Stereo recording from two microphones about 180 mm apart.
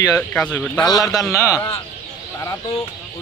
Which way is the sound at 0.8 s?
20° left (ahead or behind).